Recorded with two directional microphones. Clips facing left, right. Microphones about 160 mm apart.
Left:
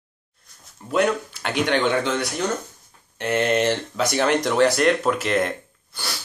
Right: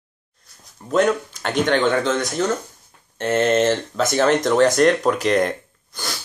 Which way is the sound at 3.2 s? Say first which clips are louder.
Right 3 dB; 45° right (ahead or behind).